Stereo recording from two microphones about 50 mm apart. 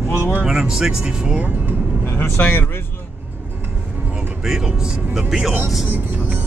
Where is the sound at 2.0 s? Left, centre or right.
Left.